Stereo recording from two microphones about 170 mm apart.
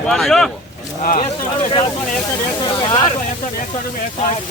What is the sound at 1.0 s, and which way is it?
Speech, 55° left (ahead or behind).